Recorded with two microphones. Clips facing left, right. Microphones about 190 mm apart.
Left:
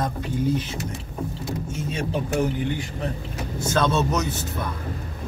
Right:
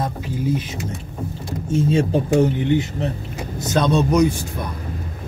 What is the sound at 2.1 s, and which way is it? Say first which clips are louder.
Speech: right 7 dB; 25° right (ahead or behind).